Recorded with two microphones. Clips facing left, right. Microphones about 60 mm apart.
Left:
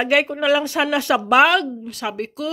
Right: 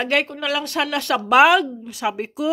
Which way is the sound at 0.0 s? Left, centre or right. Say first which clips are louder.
Left 3 dB; centre.